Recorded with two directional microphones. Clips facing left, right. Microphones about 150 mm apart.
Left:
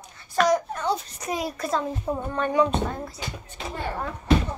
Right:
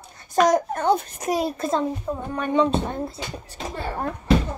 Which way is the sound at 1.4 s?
25° right (ahead or behind).